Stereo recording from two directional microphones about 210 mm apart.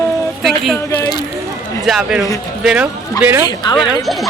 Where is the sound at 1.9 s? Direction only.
5° right (ahead or behind).